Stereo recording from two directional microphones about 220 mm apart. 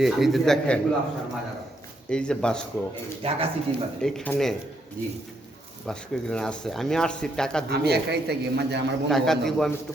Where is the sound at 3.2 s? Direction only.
25° right (ahead or behind).